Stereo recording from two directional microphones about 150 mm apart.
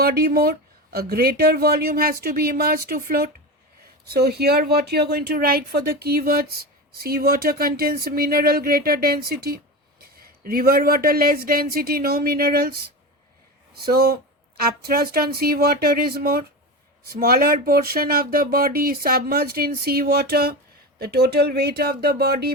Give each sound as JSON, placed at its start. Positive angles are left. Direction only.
{"t": 0.0, "sound": "speech", "side_deg": -90}
{"t": 13.8, "sound": "speech", "side_deg": -90}